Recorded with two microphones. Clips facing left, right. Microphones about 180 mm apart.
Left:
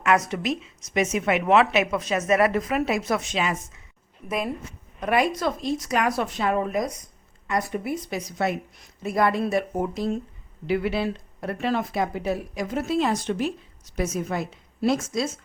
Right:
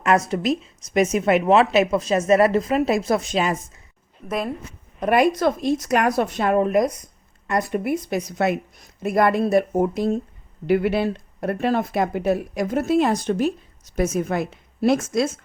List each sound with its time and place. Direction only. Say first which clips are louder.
0.0 s a woman's voice: right 3 dB; 35° right (ahead or behind)
4.9 s a woman's voice: right 5 dB; 45° right (ahead or behind)
9.4 s a woman's voice: right 6 dB; 40° right (ahead or behind); by 15.3 s 60° right (ahead or behind)